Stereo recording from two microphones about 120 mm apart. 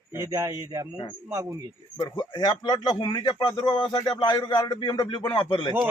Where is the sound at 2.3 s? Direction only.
40° left (ahead or behind).